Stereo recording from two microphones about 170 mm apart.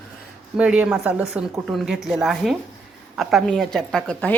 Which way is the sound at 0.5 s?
5° right (ahead or behind).